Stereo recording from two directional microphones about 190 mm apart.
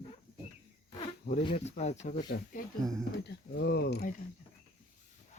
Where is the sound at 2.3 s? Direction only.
55° left (ahead or behind).